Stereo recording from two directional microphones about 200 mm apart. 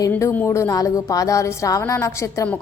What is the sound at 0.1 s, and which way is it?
Speech, 10° left (ahead or behind).